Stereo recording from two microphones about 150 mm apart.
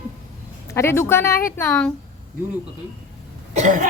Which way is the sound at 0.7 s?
15° left (ahead or behind).